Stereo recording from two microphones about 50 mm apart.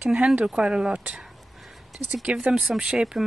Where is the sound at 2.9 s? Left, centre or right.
Centre.